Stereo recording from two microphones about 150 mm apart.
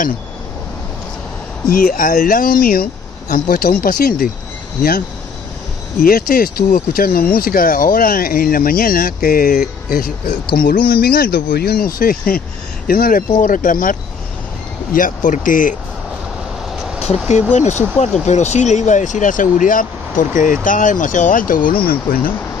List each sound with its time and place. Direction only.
1.7 s speech: 65° left (ahead or behind)
6.0 s speech: 75° left (ahead or behind)
13.4 s speech: 60° left (ahead or behind)
17.5 s speech: 50° left (ahead or behind); by 22.2 s 70° left (ahead or behind)